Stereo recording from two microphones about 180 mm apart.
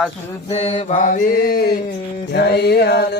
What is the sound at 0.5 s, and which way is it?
Mantra, 35° left (ahead or behind).